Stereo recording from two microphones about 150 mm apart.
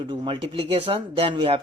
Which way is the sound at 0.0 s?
35° right (ahead or behind).